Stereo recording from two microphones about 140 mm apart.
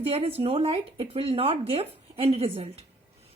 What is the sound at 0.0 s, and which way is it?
A woman's voice, 45° right (ahead or behind).